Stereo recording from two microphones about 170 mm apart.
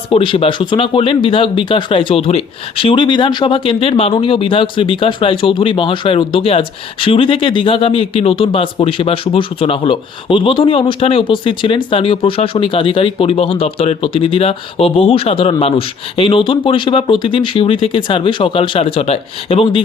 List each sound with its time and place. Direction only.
0.1 s speech: 30° left (ahead or behind)